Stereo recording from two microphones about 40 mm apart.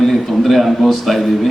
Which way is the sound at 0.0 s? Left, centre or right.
Centre.